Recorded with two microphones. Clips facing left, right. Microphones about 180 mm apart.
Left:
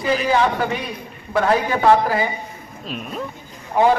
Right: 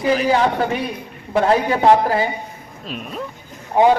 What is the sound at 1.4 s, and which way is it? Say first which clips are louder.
Speech: right 2 dB; 30° right (ahead or behind).